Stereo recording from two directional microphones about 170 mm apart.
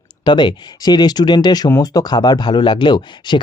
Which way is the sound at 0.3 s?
25° left (ahead or behind).